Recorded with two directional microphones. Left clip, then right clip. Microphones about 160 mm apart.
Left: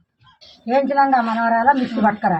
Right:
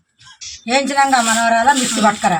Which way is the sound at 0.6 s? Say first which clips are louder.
Right 1 dB; 15° right (ahead or behind).